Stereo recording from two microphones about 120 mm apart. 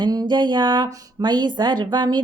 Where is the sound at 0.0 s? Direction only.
35° right (ahead or behind).